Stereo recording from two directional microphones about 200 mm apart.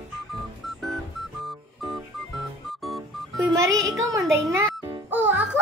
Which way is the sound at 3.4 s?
20° right (ahead or behind).